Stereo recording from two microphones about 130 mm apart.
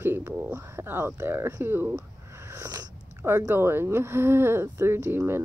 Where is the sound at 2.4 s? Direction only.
20° right (ahead or behind).